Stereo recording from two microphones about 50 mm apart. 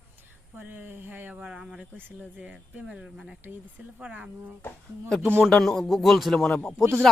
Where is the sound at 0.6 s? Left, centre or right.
Right.